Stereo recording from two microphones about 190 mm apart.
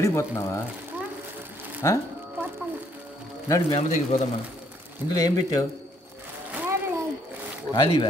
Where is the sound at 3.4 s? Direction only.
20° left (ahead or behind).